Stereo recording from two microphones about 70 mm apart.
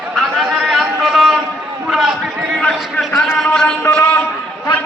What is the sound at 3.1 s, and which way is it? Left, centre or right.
Speech, centre.